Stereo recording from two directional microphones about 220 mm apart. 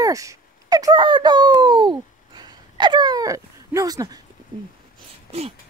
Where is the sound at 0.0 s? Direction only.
15° right (ahead or behind).